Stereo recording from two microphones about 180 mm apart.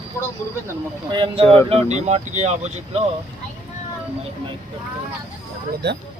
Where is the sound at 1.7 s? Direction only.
40° right (ahead or behind).